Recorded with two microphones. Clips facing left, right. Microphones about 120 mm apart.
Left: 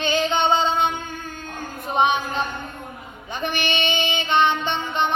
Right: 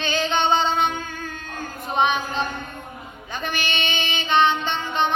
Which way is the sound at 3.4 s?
25° left (ahead or behind).